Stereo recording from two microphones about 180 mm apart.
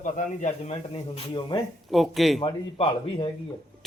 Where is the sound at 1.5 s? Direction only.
25° left (ahead or behind).